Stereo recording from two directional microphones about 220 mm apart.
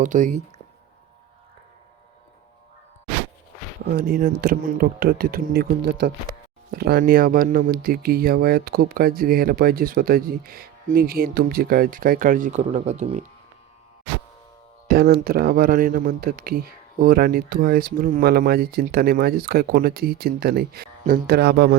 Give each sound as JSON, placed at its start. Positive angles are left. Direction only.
{"t": 0.0, "sound": "speech", "side_deg": -35}
{"t": 3.8, "sound": "speech", "side_deg": -45}
{"t": 14.8, "sound": "speech", "side_deg": -45}